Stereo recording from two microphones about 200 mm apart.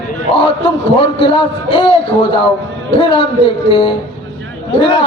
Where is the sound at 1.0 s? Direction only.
25° left (ahead or behind).